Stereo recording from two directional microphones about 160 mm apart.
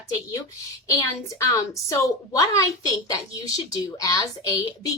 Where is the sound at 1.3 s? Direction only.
20° left (ahead or behind).